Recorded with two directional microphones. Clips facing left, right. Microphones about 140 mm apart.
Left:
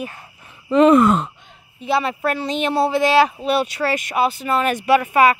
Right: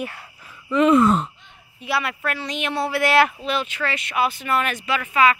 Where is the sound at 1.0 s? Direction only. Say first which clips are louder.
Left 2 dB; 70° left (ahead or behind).